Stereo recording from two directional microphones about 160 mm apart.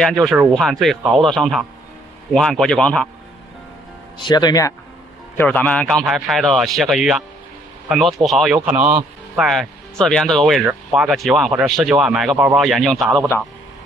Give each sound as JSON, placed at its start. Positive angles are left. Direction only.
{"t": 0.0, "sound": "a man's voice", "side_deg": 0}
{"t": 4.2, "sound": "speech", "side_deg": 25}
{"t": 5.4, "sound": "a man's voice", "side_deg": 10}